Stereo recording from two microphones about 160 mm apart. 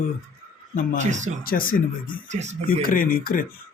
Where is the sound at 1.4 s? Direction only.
65° left (ahead or behind).